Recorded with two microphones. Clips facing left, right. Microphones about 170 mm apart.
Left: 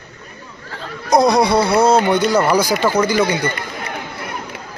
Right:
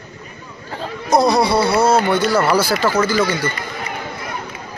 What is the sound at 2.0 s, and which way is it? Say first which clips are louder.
Speech: left 1 dB; 20° left (ahead or behind).